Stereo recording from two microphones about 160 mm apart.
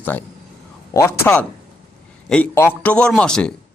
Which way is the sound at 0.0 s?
10° left (ahead or behind).